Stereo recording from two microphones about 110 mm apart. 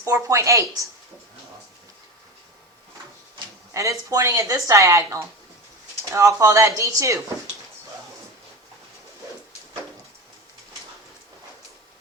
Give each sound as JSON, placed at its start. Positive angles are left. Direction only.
{"t": 0.0, "sound": "a woman's voice", "side_deg": -30}
{"t": 3.8, "sound": "a woman's voice", "side_deg": -30}